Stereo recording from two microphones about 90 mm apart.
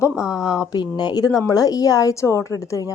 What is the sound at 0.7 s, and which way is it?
Speech, 50° left (ahead or behind).